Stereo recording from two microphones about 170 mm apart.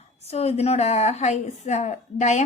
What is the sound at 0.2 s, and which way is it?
A woman's voice, 40° left (ahead or behind).